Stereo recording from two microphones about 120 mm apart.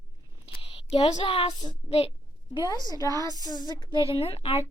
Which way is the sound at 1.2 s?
50° left (ahead or behind).